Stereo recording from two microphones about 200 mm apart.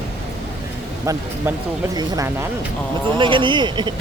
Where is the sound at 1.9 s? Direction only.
15° right (ahead or behind).